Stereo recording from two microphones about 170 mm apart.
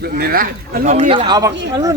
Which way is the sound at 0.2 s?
65° right (ahead or behind).